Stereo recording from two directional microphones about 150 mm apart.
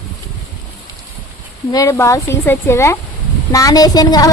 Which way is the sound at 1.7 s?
20° left (ahead or behind).